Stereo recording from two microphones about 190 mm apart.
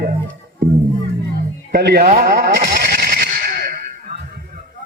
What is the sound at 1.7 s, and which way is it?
Speech, 60° right (ahead or behind).